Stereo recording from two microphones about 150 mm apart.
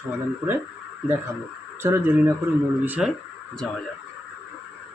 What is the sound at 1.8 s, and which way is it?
Speech, 15° right (ahead or behind).